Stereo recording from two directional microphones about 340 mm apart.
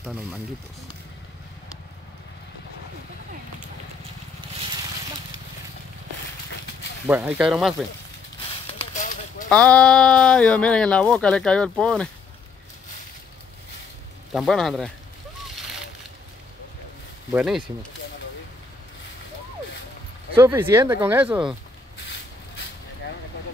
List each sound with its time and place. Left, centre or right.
0.0 s speech: centre
7.1 s speech: centre
8.6 s a sound: left
9.5 s speech: centre
14.3 s speech: centre
17.3 s speech: centre
20.3 s speech: centre